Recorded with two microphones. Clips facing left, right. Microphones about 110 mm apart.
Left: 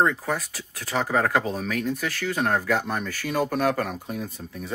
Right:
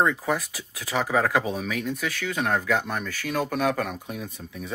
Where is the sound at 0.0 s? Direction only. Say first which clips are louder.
Even; centre (ahead or behind).